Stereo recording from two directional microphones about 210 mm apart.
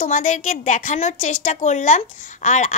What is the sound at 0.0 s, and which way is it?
A woman's voice, 35° left (ahead or behind).